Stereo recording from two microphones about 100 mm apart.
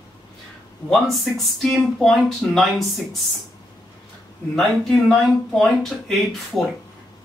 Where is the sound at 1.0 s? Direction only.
Centre (ahead or behind).